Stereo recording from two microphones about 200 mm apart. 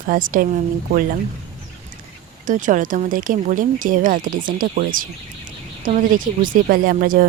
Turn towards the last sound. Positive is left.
turn(degrees=-45)  # may be behind; listen again after turning